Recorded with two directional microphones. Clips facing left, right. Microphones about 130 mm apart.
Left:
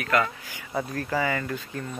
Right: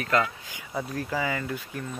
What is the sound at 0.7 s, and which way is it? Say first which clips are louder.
Speech: left 2 dB; centre (ahead or behind).